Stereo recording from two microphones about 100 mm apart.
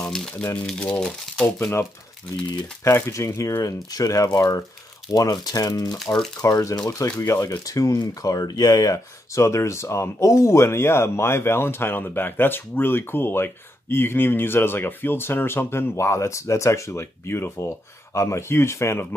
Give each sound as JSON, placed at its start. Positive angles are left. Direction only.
{"t": 0.0, "sound": "crumpling", "side_deg": 5}
{"t": 0.7, "sound": "speech", "side_deg": 10}
{"t": 1.4, "sound": "speech", "side_deg": 20}